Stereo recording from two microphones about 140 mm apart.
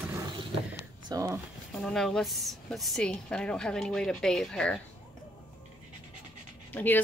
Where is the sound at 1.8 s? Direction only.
5° left (ahead or behind).